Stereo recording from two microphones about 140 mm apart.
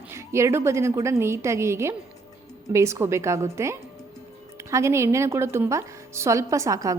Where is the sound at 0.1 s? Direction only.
20° right (ahead or behind).